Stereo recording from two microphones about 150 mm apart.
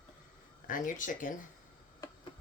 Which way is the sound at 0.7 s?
60° left (ahead or behind).